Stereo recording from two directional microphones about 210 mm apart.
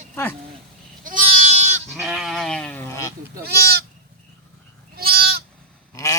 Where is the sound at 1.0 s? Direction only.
40° right (ahead or behind).